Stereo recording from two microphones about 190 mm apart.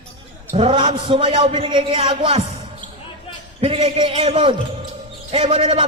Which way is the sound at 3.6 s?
30° right (ahead or behind).